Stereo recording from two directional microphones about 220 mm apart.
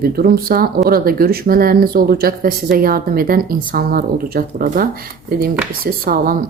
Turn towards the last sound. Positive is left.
turn(degrees=-40)  # may be behind; listen again after turning